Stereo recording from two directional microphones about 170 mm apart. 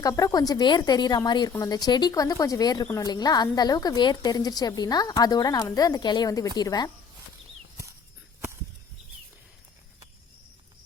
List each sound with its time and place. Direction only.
0.0 s a woman's voice: 20° left (ahead or behind)